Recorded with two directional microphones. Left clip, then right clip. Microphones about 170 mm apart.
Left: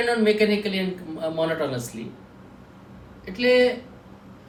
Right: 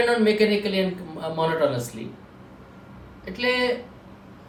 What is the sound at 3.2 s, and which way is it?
Speech, 20° right (ahead or behind).